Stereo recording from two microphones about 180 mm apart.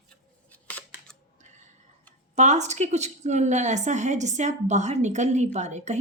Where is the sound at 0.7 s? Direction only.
10° left (ahead or behind).